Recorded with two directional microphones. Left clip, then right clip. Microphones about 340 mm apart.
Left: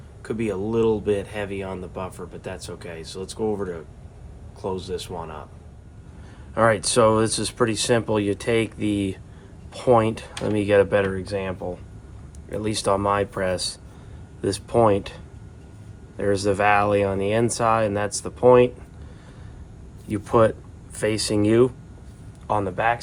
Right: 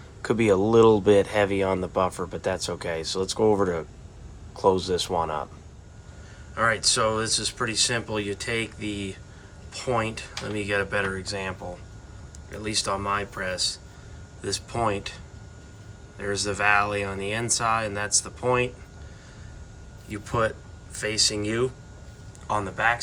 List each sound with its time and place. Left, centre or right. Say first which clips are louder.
0.2 s speech: right 6 dB; right
6.5 s speech: left 3 dB; centre
20.1 s speech: left 7 dB; centre